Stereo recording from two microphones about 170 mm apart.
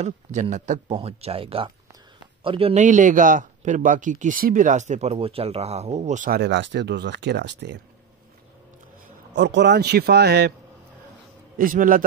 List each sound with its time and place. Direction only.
0.0 s speech: 45° right (ahead or behind)
0.9 s speech: 35° right (ahead or behind)
5.1 s speech: 35° right (ahead or behind); by 6.4 s 50° right (ahead or behind)
6.4 s speech: 90° right
9.3 s speech: 90° right; by 10.5 s 75° right (ahead or behind)
11.5 s a man's voice: 55° right (ahead or behind)